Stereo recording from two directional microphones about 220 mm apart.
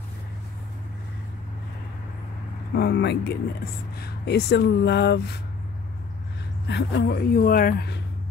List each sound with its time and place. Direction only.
2.7 s speech: 50° left (ahead or behind)
6.7 s speech: 50° left (ahead or behind)